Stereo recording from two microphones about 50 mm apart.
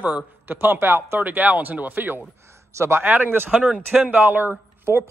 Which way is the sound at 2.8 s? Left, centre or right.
Right.